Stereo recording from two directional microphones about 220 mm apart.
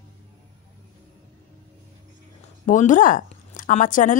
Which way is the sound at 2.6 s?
35° left (ahead or behind).